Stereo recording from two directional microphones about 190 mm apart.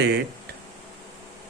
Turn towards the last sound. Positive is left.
turn(degrees=-60)  # may be behind; listen again after turning